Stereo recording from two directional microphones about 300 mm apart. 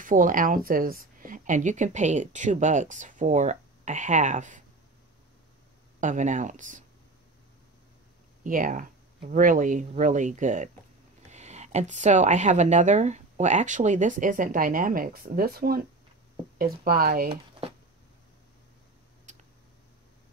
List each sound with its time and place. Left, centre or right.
0.0 s a woman's voice: right
5.9 s a woman's voice: right
8.5 s a woman's voice: right
17.3 s a sound: centre